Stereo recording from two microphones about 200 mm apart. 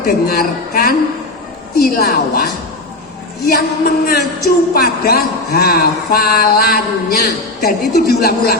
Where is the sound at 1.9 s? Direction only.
50° left (ahead or behind).